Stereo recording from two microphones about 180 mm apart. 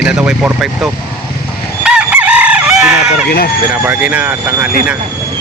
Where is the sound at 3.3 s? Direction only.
60° left (ahead or behind).